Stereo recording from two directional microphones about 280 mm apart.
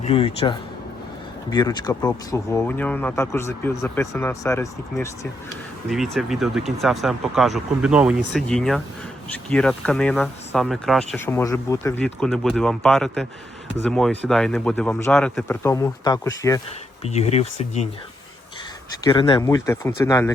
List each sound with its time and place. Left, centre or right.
0.0 s speech: left
17.0 s speech: left
19.0 s speech: centre